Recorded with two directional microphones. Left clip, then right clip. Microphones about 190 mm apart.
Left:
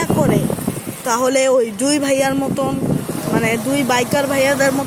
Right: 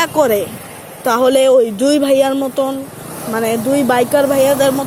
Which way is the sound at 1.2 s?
Centre (ahead or behind).